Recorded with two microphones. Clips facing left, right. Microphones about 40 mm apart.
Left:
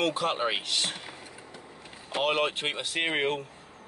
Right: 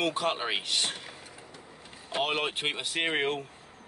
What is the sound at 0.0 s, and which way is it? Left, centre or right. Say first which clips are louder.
Speech: left 2 dB; centre.